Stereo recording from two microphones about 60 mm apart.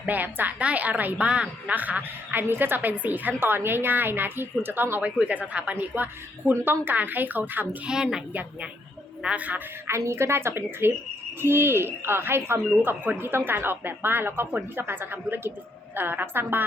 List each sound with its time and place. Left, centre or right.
0.0 s a woman's voice: right
1.3 s a woman's voice: centre
7.9 s a woman's voice: centre
9.2 s a woman's voice: right
9.8 s a woman's voice: right